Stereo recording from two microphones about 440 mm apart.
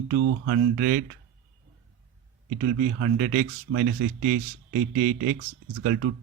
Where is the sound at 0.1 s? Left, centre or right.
Right.